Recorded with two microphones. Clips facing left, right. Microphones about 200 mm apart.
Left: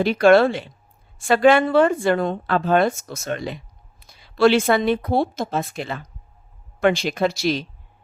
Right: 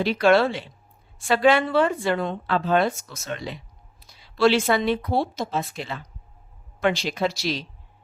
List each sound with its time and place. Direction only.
0.0 s speech: 50° left (ahead or behind)